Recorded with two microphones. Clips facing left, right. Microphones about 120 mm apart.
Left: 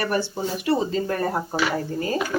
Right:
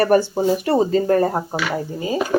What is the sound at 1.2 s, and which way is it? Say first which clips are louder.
Speech: right 4 dB; 20° right (ahead or behind).